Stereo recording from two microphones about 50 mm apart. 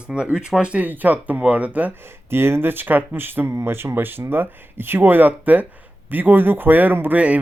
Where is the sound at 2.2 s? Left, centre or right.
Right.